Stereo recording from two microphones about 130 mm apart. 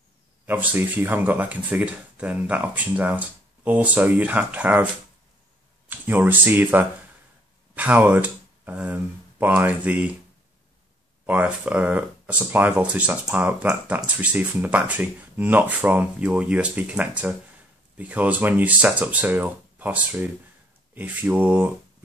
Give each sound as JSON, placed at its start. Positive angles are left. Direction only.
{"t": 0.5, "sound": "speech", "side_deg": -15}
{"t": 5.9, "sound": "speech", "side_deg": -15}
{"t": 11.2, "sound": "speech", "side_deg": -10}